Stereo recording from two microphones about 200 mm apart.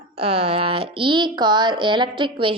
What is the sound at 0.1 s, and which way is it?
Speech, 30° right (ahead or behind).